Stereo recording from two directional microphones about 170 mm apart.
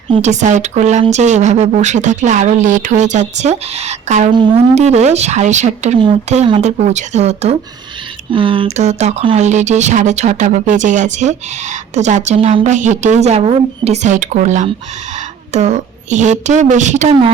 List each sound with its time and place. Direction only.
0.1 s speech: 45° right (ahead or behind)
4.3 s speech: 30° right (ahead or behind)
4.7 s speech: 40° right (ahead or behind)
8.3 s speech: 30° right (ahead or behind)